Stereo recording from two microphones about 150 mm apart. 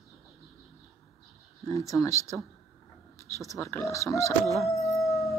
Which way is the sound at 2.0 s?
20° left (ahead or behind).